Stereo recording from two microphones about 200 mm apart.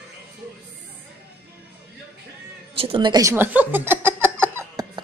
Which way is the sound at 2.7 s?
25° right (ahead or behind).